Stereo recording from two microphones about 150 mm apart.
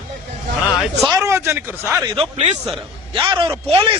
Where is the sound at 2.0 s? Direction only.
35° right (ahead or behind).